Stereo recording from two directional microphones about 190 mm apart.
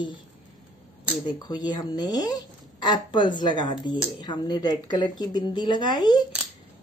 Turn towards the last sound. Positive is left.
turn(degrees=25)  # may be behind; listen again after turning